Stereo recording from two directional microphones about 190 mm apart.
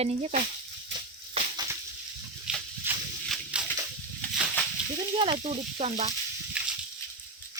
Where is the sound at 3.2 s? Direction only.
Centre (ahead or behind).